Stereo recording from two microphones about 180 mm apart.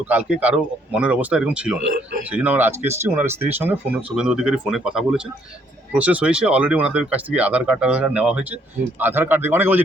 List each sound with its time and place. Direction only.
0.0 s speech: 10° right (ahead or behind)